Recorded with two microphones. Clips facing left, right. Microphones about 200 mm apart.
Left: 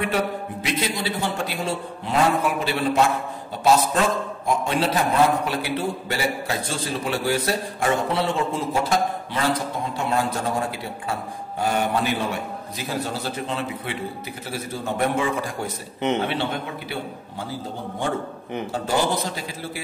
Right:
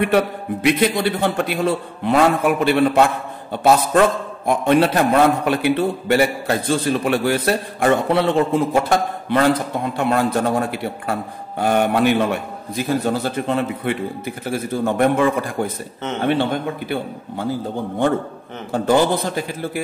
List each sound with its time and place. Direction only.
0.0 s a man's voice: 60° right (ahead or behind)
4.5 s a man's voice: 60° right (ahead or behind)
18.7 s a man's voice: 55° right (ahead or behind)